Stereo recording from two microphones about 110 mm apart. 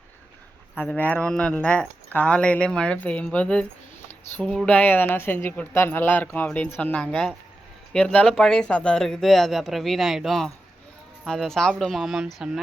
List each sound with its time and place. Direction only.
0.8 s speech: 15° left (ahead or behind); by 12.6 s 5° right (ahead or behind)